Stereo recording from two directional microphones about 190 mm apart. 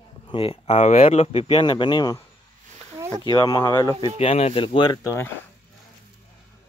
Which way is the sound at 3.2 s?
20° left (ahead or behind).